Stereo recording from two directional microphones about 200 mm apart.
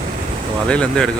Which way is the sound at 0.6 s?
5° left (ahead or behind).